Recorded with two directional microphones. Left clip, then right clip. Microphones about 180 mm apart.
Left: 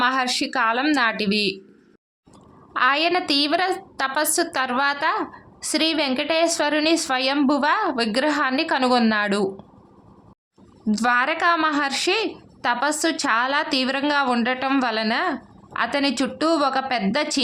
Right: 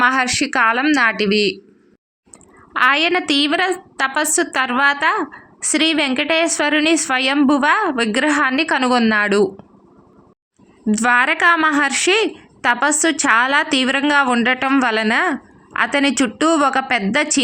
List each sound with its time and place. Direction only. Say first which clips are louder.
0.0 s a woman's voice: right 5 dB; 20° right (ahead or behind)
2.7 s a woman's voice: right 4 dB; 15° right (ahead or behind)
10.9 s a woman's voice: right 5 dB; 15° right (ahead or behind)